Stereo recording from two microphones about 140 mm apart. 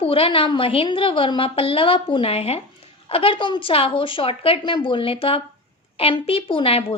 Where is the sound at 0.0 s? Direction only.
40° left (ahead or behind).